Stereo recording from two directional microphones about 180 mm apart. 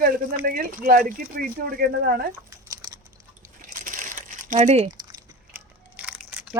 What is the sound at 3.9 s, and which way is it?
Crumpling, 45° right (ahead or behind).